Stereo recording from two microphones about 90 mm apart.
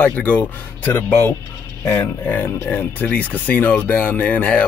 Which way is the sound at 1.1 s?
30° left (ahead or behind).